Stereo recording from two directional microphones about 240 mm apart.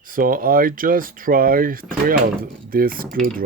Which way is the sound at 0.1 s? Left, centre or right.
Right.